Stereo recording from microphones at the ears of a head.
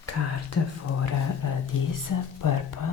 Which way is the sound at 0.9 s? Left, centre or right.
Left.